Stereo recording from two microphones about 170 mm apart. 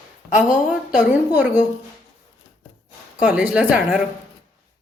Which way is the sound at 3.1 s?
5° right (ahead or behind).